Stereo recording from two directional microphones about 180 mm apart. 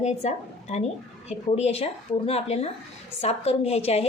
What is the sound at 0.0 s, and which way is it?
A woman's voice, 40° left (ahead or behind).